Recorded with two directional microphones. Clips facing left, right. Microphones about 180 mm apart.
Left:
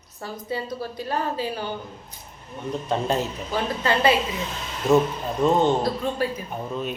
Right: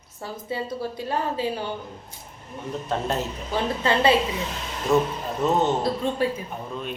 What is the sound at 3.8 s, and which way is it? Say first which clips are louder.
Speech: right 1 dB; 25° right (ahead or behind).